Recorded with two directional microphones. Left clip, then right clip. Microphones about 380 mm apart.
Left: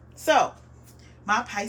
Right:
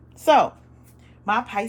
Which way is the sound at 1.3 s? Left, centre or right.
Centre.